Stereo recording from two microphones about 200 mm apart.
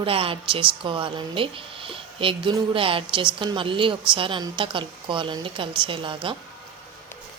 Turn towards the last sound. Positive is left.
turn(degrees=-25)  # may be behind; listen again after turning